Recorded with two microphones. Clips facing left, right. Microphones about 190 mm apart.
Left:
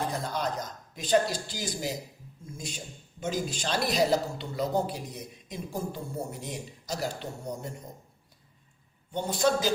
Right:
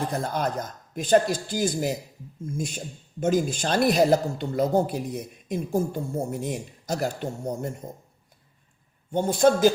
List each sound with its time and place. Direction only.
0.1 s speech: 55° right (ahead or behind)
9.1 s speech: 50° right (ahead or behind)